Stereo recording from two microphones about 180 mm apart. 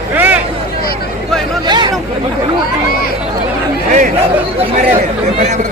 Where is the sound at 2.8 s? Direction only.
55° left (ahead or behind).